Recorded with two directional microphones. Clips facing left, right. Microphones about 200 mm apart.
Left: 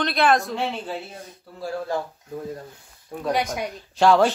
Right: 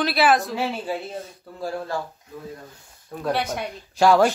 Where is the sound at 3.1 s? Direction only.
10° left (ahead or behind).